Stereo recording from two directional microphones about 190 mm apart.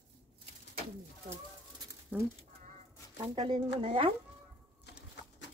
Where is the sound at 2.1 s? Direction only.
10° right (ahead or behind).